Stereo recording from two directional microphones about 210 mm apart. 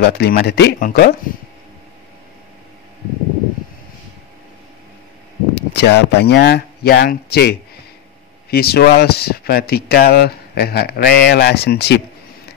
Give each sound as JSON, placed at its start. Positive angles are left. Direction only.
{"t": 0.0, "sound": "speech", "side_deg": 50}
{"t": 5.5, "sound": "speech", "side_deg": 55}